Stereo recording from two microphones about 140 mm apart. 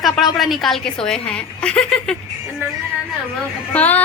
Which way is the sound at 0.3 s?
Centre (ahead or behind).